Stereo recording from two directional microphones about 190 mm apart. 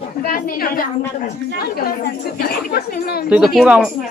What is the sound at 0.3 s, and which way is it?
Speech, 50° left (ahead or behind).